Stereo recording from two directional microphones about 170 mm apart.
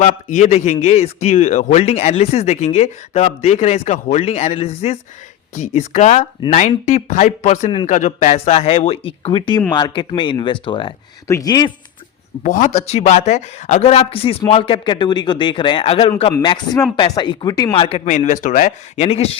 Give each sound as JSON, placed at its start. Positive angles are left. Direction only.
{"t": 0.0, "sound": "a man's voice", "side_deg": 45}
{"t": 12.4, "sound": "a man's voice", "side_deg": 50}